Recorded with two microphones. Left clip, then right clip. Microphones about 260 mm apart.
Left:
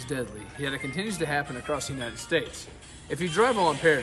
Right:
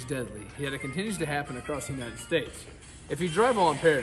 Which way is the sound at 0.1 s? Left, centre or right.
Centre.